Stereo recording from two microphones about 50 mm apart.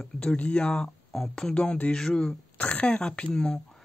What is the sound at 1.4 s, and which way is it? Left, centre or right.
Speech, centre.